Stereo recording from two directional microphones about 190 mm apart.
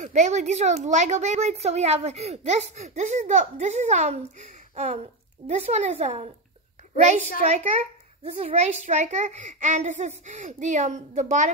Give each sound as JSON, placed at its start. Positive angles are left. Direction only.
{"t": 0.0, "sound": "a woman's voice", "side_deg": -40}